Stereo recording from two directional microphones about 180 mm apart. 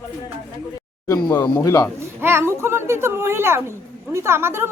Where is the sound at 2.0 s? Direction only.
15° right (ahead or behind).